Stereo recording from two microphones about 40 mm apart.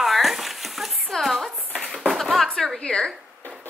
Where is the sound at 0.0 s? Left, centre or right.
Centre.